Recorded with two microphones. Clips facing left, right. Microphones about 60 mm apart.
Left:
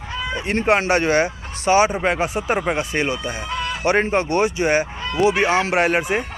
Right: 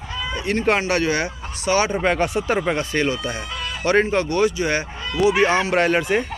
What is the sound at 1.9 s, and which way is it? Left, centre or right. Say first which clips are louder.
Speech: right 1 dB; centre.